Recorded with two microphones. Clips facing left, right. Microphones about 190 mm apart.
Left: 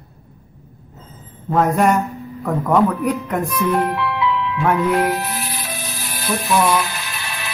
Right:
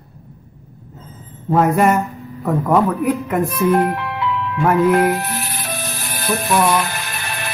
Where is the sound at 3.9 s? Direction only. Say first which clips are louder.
Left 2 dB; 50° right (ahead or behind).